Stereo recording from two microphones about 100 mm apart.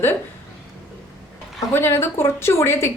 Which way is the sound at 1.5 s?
25° left (ahead or behind).